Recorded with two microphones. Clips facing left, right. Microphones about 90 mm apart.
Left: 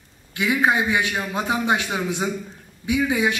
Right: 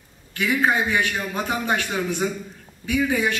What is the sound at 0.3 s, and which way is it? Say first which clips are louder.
A man's voice: left 1 dB; 20° left (ahead or behind).